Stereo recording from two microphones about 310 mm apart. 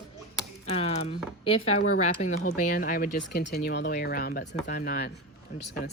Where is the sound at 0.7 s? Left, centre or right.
Left.